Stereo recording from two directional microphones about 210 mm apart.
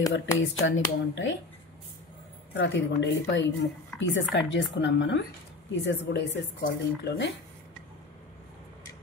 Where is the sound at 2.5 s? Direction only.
60° left (ahead or behind).